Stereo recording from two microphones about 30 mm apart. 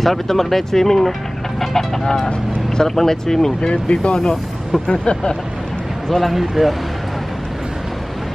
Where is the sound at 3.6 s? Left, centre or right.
Left.